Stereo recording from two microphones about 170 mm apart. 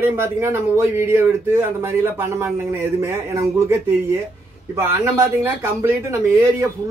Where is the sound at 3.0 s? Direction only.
15° right (ahead or behind).